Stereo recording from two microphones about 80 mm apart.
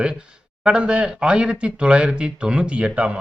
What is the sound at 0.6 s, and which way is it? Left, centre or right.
A man's voice, centre.